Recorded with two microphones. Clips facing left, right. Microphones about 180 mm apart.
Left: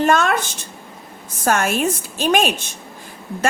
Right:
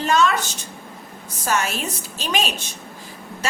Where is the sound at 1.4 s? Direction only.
50° left (ahead or behind).